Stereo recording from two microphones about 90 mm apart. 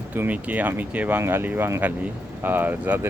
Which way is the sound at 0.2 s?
15° right (ahead or behind).